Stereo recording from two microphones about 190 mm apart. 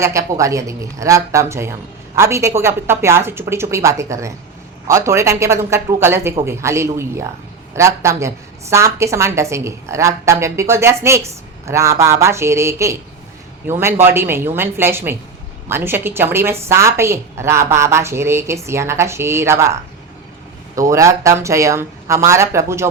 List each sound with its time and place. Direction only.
0.0 s a woman's voice: 15° right (ahead or behind)